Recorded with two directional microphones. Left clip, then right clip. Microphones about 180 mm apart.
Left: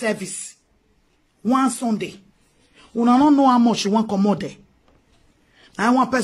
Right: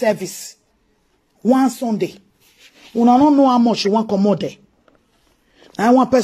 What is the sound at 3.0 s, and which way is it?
A man's voice, 10° right (ahead or behind).